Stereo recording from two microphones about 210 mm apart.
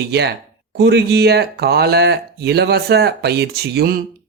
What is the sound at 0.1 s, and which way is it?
Speech, 50° right (ahead or behind).